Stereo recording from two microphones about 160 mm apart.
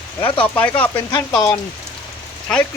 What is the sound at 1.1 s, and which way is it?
Speech, 20° left (ahead or behind).